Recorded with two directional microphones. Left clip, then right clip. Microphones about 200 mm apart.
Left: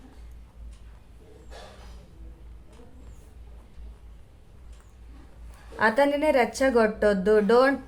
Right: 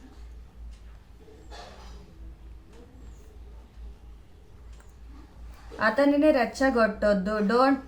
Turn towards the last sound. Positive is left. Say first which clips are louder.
# left 4 dB
turn(degrees=35)  # may be behind; listen again after turning